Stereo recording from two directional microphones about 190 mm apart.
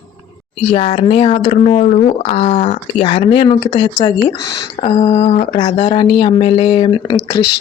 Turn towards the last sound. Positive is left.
turn(degrees=25)  # may be behind; listen again after turning